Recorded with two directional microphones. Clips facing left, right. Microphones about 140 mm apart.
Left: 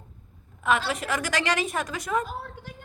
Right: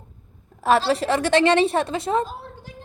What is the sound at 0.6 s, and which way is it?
A woman's voice, 35° right (ahead or behind).